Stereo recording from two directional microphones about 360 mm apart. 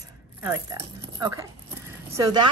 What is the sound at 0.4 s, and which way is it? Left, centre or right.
A woman's voice, centre.